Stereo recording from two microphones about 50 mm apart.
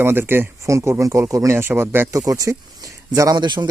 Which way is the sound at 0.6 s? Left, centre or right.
Right.